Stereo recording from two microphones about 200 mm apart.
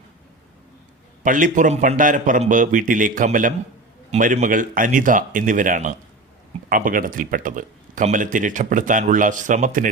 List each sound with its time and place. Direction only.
1.2 s speech: 40° right (ahead or behind)